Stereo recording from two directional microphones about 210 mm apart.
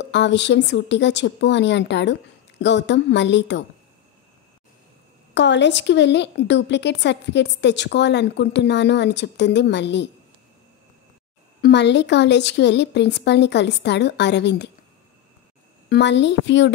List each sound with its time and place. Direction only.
0.0 s a woman's voice: 55° left (ahead or behind)
5.3 s a woman's voice: 55° left (ahead or behind)
11.6 s a woman's voice: 55° left (ahead or behind)
15.9 s a woman's voice: 55° left (ahead or behind)